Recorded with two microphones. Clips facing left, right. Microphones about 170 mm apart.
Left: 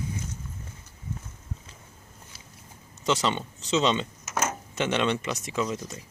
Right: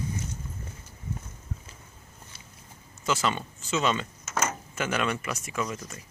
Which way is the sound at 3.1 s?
20° left (ahead or behind).